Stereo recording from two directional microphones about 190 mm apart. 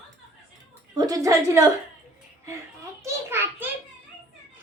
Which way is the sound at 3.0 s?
10° right (ahead or behind).